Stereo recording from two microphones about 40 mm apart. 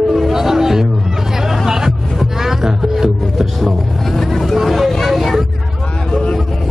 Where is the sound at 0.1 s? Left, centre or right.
Centre.